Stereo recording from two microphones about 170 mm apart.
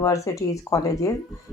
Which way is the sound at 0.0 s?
20° left (ahead or behind).